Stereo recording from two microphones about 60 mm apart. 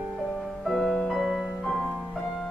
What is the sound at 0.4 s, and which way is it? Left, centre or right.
Music, centre.